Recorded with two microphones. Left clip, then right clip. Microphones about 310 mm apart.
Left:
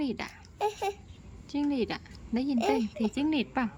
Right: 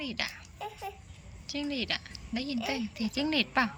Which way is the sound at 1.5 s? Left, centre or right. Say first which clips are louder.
Left 2 dB; centre.